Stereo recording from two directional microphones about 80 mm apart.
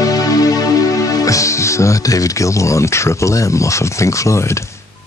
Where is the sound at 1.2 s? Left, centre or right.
Left.